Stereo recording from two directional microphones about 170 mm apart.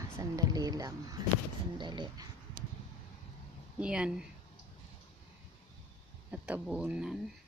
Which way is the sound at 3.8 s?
5° right (ahead or behind).